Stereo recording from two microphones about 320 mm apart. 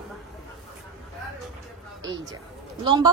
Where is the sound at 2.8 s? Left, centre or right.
Centre.